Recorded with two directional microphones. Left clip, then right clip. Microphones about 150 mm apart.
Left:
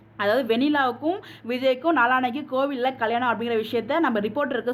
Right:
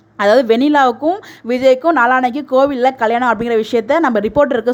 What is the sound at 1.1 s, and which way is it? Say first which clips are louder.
A woman's voice: right 10 dB; 40° right (ahead or behind).